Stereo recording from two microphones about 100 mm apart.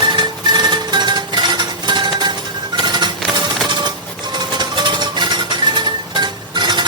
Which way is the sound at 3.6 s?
45° right (ahead or behind).